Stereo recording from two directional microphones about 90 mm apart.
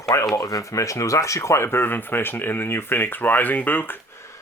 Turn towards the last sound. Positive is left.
turn(degrees=25)  # may be behind; listen again after turning